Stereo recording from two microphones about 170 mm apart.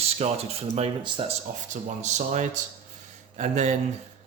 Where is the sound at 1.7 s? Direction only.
45° right (ahead or behind).